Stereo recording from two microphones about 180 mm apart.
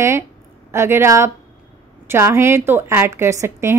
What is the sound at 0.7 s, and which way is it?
A woman's voice, 15° right (ahead or behind).